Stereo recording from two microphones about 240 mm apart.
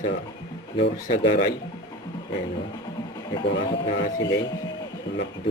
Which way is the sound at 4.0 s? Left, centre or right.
Left.